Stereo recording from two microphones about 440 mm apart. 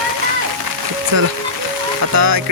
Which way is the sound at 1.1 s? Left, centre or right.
Right.